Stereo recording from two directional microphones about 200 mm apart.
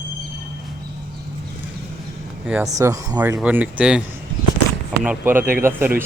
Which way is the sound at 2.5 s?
10° right (ahead or behind).